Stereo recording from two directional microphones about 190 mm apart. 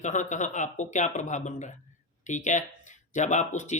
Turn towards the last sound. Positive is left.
turn(degrees=40)  # may be behind; listen again after turning